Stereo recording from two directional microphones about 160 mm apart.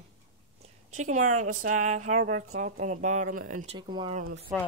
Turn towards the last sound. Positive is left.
turn(degrees=-10)  # may be behind; listen again after turning